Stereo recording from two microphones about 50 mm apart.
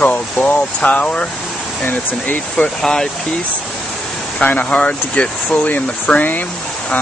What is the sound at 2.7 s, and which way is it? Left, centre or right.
Speech, centre.